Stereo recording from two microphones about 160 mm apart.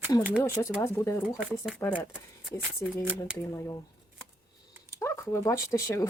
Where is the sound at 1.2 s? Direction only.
Centre (ahead or behind).